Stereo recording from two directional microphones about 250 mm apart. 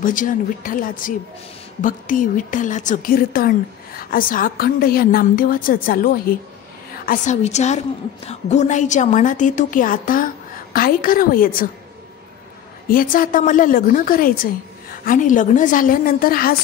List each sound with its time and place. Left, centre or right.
0.0 s a woman's voice: left
12.8 s speech: left